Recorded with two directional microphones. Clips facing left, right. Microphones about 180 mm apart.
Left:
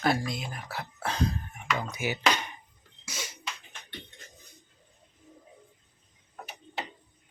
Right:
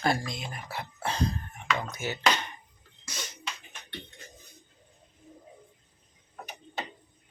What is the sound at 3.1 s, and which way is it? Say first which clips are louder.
Music: even; 5° left (ahead or behind).